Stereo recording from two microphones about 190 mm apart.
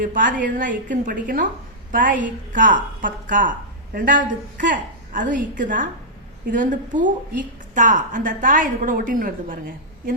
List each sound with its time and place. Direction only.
0.0 s a woman's voice: 45° right (ahead or behind)